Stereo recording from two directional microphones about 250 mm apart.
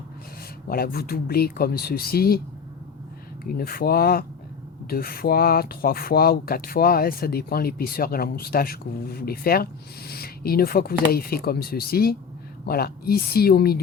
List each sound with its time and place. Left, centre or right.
0.7 s speech: left
3.6 s speech: left